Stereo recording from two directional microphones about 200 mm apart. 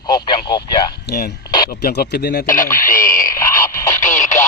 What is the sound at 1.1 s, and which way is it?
Speech, 55° left (ahead or behind).